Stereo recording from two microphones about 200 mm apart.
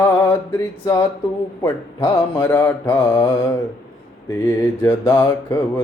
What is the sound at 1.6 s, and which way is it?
Mantra, 15° left (ahead or behind).